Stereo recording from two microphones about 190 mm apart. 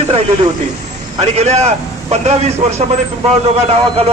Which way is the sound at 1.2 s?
35° right (ahead or behind).